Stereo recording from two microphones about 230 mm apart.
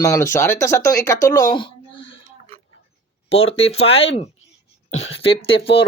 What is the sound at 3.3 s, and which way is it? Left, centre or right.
Speech, left.